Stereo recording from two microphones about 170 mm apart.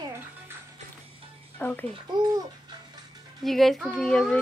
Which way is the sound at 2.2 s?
20° right (ahead or behind).